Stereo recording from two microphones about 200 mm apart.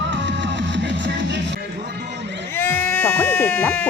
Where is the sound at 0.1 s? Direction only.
65° right (ahead or behind).